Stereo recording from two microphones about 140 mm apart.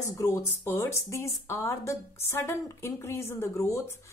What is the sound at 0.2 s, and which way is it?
Speech, 20° left (ahead or behind).